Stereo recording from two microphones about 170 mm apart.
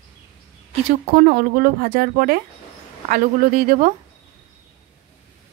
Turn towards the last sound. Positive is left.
turn(degrees=-55)  # may be behind; listen again after turning